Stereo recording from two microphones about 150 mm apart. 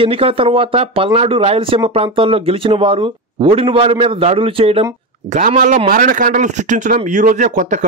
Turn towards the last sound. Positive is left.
turn(degrees=-55)  # may be behind; listen again after turning